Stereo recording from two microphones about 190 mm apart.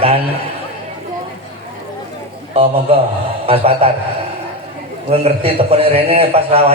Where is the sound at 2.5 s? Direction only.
30° right (ahead or behind).